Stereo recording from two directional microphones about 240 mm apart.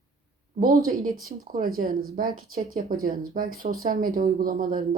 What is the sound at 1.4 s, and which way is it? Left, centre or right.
Speech, right.